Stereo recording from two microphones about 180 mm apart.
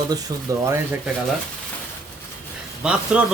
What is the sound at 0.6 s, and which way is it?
Speech, 10° right (ahead or behind).